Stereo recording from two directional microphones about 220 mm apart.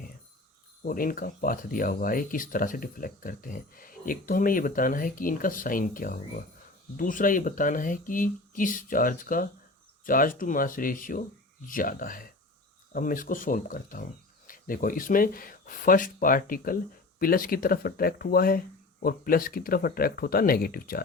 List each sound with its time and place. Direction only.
0.8 s speech: 40° left (ahead or behind)